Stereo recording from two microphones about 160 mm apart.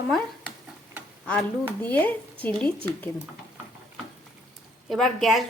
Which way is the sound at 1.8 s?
10° left (ahead or behind).